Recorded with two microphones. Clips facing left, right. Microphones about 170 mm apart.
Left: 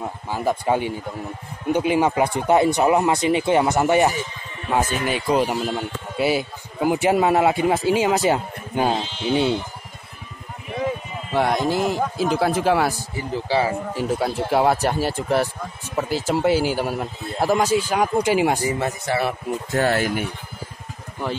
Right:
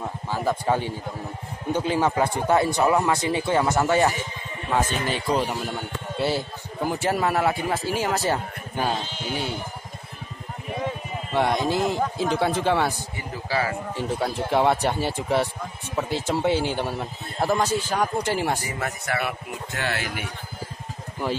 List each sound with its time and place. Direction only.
0.3 s a man's voice: 15° left (ahead or behind)
11.3 s a man's voice: centre (ahead or behind)
13.1 s speech: 25° left (ahead or behind)
13.9 s a man's voice: 5° left (ahead or behind); by 20.2 s 45° left (ahead or behind)